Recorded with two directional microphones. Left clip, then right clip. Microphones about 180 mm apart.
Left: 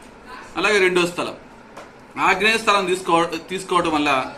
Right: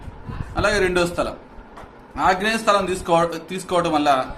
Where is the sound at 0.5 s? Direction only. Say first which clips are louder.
Left 2 dB; 55° right (ahead or behind).